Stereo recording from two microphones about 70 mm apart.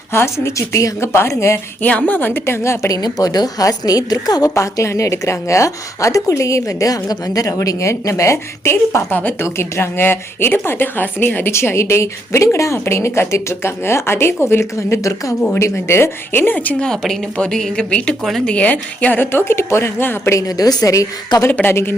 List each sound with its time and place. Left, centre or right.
0.1 s speech: left
1.8 s a woman's voice: left
2.9 s a woman's voice: left
4.5 s a woman's voice: left
16.8 s speech: centre; by 20.3 s left
20.6 s a woman's voice: left
21.4 s speech: left